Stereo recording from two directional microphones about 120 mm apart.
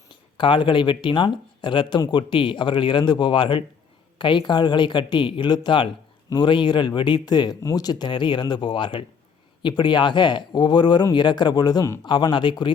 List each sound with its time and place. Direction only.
0.1 s speech: 45° left (ahead or behind)